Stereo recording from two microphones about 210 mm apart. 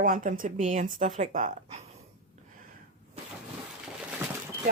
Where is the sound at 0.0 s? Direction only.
40° right (ahead or behind).